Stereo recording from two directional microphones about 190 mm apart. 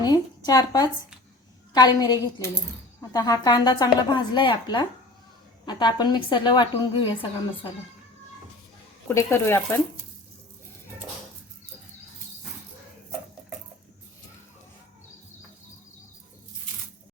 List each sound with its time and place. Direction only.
0.0 s a woman's voice: 20° left (ahead or behind)
9.0 s speech: 15° left (ahead or behind)